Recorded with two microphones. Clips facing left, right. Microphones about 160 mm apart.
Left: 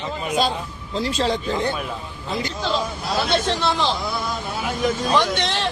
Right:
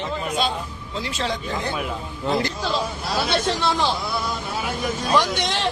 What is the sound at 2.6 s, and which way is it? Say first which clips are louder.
A man's voice: left 1 dB; 5° right (ahead or behind).